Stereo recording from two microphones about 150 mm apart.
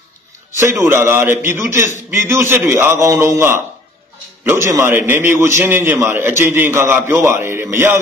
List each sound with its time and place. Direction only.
0.8 s a man's voice: 15° right (ahead or behind)
4.7 s a man's voice: 15° right (ahead or behind)